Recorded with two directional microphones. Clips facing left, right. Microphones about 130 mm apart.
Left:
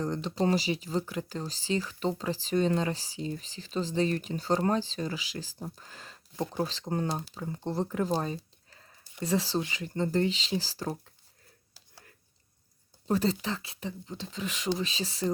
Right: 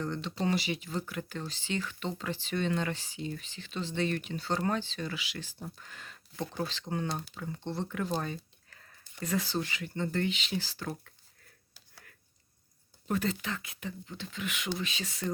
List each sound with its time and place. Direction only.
0.0 s speech: 40° left (ahead or behind)
11.7 s a sound: 35° left (ahead or behind)
13.1 s speech: 30° left (ahead or behind)